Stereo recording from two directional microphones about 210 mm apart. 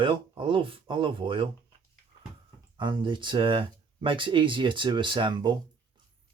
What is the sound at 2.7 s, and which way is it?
Speech, 20° right (ahead or behind).